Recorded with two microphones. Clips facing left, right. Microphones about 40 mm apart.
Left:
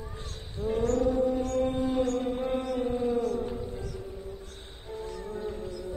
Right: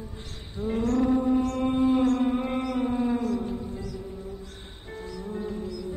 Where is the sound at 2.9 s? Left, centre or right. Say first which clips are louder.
Right 2 dB; right.